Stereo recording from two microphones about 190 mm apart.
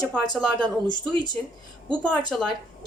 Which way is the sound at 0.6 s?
25° right (ahead or behind).